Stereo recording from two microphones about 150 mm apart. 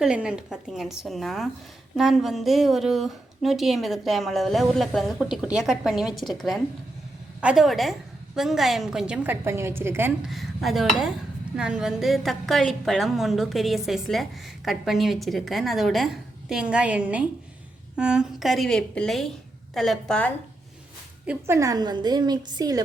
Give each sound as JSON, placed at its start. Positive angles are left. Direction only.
{"t": 0.0, "sound": "a woman's voice", "side_deg": -5}
{"t": 10.2, "sound": "a woman's voice", "side_deg": 0}
{"t": 21.2, "sound": "a woman's voice", "side_deg": -15}